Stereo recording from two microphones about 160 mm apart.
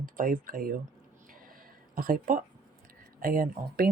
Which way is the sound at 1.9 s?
65° right (ahead or behind).